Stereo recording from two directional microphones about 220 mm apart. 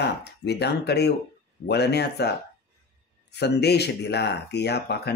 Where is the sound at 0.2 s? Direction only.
50° left (ahead or behind).